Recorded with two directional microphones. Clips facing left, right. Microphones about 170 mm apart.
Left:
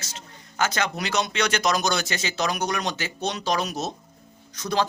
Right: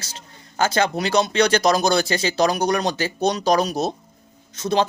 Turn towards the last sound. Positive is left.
turn(degrees=-25)  # may be behind; listen again after turning